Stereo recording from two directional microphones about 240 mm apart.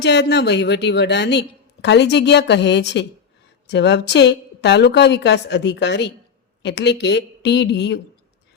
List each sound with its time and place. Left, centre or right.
0.0 s a woman's voice: left